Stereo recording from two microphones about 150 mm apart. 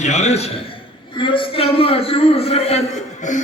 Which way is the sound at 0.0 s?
50° left (ahead or behind).